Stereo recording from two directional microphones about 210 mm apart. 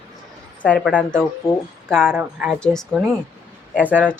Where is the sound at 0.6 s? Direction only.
5° left (ahead or behind).